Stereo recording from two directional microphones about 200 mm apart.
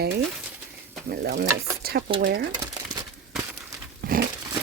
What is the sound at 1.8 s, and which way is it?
Stir, 50° right (ahead or behind).